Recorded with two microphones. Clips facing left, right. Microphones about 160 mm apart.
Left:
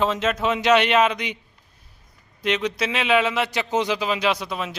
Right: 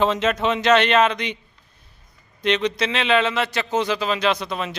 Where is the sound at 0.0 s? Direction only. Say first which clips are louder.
Right 2 dB; centre (ahead or behind).